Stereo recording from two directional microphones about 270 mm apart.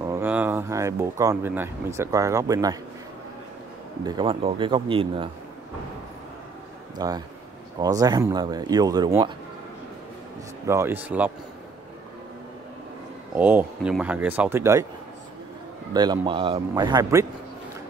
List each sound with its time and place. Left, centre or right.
0.0 s speech: centre
4.0 s a man's voice: centre
7.0 s speech: centre
10.7 s speech: centre
13.4 s speech: centre
15.9 s speech: centre